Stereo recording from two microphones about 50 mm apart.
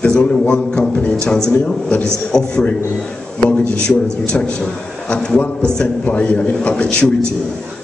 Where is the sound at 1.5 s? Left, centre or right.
Left.